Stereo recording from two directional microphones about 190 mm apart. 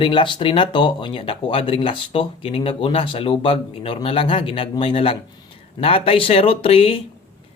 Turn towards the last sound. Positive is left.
turn(degrees=30)  # may be behind; listen again after turning